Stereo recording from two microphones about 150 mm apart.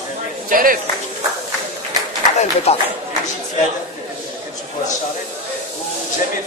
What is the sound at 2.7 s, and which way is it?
Speech, 45° left (ahead or behind).